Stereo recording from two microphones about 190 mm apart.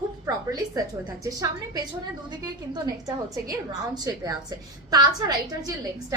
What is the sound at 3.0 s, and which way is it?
A woman's voice, 20° right (ahead or behind).